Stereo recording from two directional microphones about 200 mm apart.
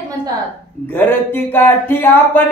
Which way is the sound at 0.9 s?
10° left (ahead or behind).